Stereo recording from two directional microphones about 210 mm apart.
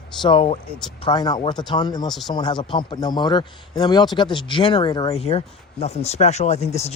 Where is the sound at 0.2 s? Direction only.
25° left (ahead or behind).